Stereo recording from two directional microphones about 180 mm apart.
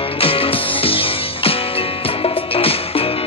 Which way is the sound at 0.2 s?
30° left (ahead or behind).